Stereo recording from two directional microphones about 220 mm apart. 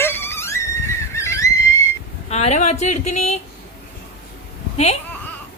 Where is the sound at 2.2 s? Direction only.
30° left (ahead or behind).